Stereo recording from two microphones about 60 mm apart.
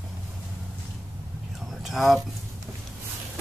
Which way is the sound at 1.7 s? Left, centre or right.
Centre.